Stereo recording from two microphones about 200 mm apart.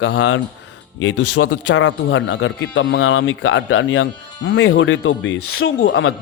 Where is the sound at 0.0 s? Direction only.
85° left.